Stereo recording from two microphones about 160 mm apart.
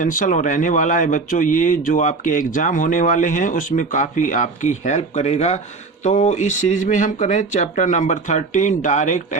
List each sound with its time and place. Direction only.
0.0 s speech: 55° left (ahead or behind)